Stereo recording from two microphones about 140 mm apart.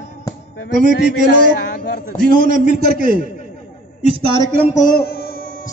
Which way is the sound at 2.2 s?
85° right.